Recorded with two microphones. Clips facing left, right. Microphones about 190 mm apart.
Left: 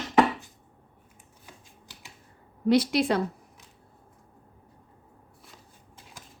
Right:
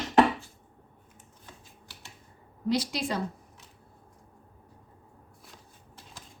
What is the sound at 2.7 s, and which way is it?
Speech, 60° left (ahead or behind).